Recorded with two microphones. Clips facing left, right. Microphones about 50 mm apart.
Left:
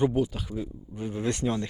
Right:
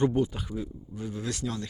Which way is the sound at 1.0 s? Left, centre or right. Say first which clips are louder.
Left 5 dB; left.